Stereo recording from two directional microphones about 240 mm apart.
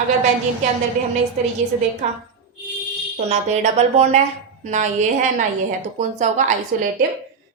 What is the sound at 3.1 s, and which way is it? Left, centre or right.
A woman's voice, right.